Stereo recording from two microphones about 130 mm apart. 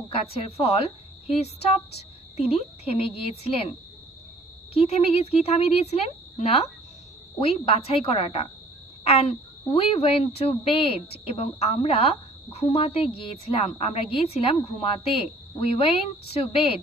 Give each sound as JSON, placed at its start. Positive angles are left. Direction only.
{"t": 0.1, "sound": "a woman's voice", "side_deg": 50}
{"t": 4.7, "sound": "a woman's voice", "side_deg": 50}